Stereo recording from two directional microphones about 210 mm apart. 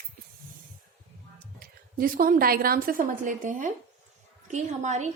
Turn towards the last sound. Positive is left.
turn(degrees=-35)  # may be behind; listen again after turning